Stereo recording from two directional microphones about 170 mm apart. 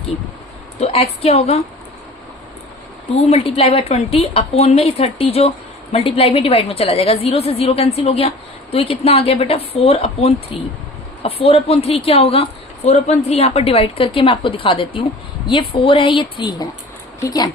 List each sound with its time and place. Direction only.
0.8 s a woman's voice: 35° left (ahead or behind)
3.2 s a woman's voice: 35° left (ahead or behind); by 17.5 s 20° left (ahead or behind)